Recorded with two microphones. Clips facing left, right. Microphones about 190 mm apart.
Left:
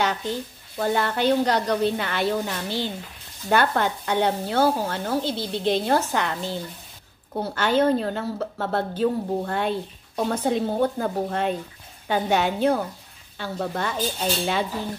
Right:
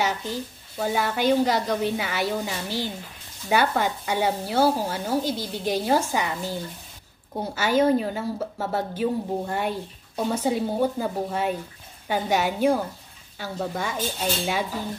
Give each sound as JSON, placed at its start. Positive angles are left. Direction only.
{"t": 0.0, "sound": "speech", "side_deg": -10}